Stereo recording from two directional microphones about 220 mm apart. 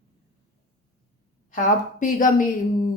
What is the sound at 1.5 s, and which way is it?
Speech, 35° left (ahead or behind).